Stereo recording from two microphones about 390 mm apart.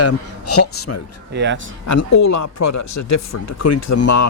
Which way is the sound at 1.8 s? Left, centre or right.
Left.